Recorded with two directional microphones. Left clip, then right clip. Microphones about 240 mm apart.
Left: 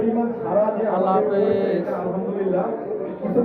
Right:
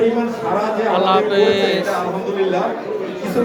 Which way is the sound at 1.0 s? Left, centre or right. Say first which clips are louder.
Right 6 dB; centre.